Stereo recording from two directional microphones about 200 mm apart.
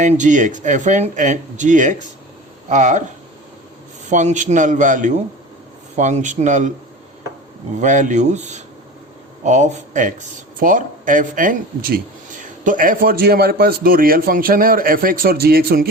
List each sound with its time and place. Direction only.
0.0 s speech: 40° right (ahead or behind)
4.0 s speech: 35° right (ahead or behind)
7.8 s a man's voice: 40° right (ahead or behind)